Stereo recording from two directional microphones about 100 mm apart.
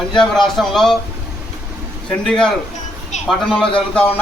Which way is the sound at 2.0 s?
10° left (ahead or behind).